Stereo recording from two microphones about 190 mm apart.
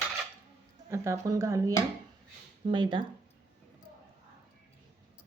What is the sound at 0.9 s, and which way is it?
Speech, 15° right (ahead or behind).